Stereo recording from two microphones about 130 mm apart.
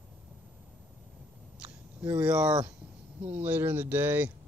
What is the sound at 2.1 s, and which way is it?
Speech, 20° right (ahead or behind).